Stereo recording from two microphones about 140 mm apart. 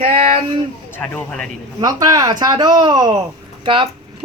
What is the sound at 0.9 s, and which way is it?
Speech, 10° left (ahead or behind).